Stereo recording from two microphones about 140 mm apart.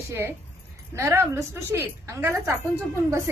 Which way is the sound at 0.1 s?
15° right (ahead or behind).